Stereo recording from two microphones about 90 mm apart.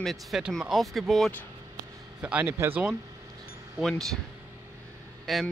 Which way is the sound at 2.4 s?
25° right (ahead or behind).